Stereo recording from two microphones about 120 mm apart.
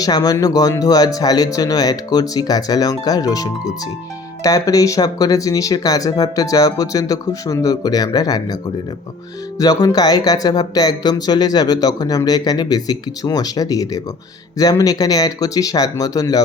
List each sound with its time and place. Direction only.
0.0 s speech: 30° left (ahead or behind)
9.8 s speech: 35° left (ahead or behind)